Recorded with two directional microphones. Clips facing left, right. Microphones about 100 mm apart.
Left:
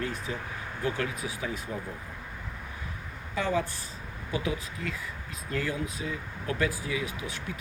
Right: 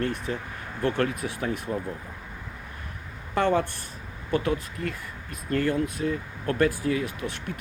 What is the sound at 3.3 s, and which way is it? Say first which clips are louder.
Speech: right 6 dB; 60° right (ahead or behind).